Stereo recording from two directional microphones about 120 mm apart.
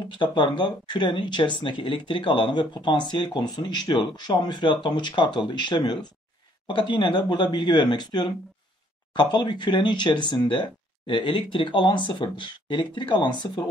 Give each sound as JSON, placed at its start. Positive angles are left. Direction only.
{"t": 0.2, "sound": "speech", "side_deg": 40}